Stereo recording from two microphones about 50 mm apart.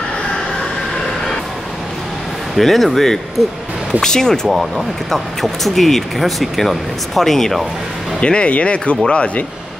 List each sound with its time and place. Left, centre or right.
2.5 s speech: centre
4.5 s speech: centre
8.2 s speech: left